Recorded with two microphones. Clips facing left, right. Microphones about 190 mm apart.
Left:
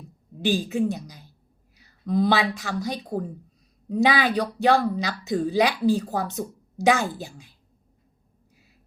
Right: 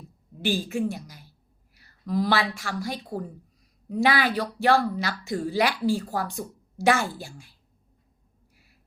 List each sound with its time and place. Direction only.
0.4 s speech: 15° left (ahead or behind)
1.7 s a sound: 20° left (ahead or behind)
2.6 s a woman's voice: 20° left (ahead or behind)